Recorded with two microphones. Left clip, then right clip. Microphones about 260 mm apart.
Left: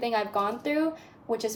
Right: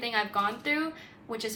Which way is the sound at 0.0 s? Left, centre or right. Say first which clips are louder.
Left 1 dB; right.